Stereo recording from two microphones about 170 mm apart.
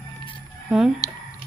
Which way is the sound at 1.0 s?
20° left (ahead or behind).